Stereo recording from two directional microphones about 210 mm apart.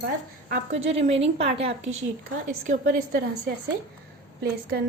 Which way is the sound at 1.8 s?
65° right (ahead or behind).